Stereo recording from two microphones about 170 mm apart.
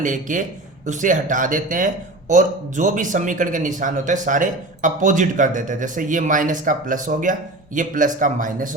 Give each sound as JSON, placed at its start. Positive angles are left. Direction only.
{"t": 0.0, "sound": "a man's voice", "side_deg": -50}